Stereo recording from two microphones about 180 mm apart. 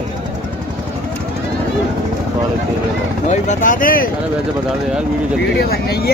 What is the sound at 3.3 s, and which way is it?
Speech, 45° left (ahead or behind).